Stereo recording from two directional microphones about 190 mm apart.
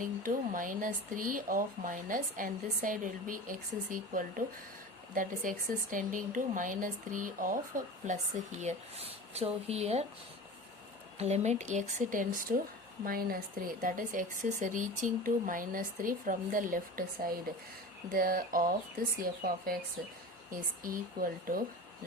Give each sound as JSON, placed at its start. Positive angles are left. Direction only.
{"t": 0.0, "sound": "speech", "side_deg": -45}
{"t": 8.6, "sound": "speech", "side_deg": -30}
{"t": 11.2, "sound": "speech", "side_deg": -35}